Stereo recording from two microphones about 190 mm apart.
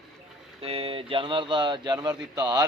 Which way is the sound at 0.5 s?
30° right (ahead or behind).